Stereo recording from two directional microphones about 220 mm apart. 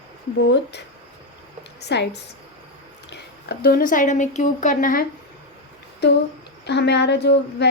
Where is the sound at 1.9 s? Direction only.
50° left (ahead or behind).